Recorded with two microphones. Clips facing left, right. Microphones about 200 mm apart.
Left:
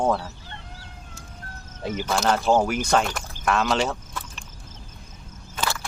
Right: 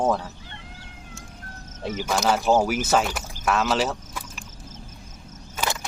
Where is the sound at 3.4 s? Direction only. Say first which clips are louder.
Even; centre (ahead or behind).